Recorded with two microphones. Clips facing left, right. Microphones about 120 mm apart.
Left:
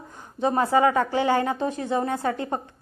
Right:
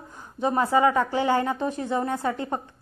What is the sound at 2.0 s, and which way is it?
Speech, 45° left (ahead or behind).